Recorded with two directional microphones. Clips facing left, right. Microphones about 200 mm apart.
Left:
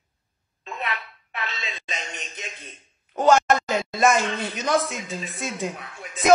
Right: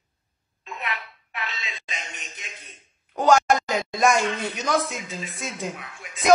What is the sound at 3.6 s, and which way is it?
Speech, centre (ahead or behind).